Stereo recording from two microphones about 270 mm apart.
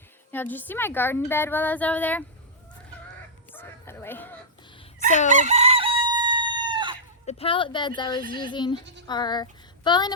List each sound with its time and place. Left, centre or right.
0.3 s a woman's voice: centre
3.5 s chicken: centre
5.3 s chicken: right
7.3 s a woman's voice: left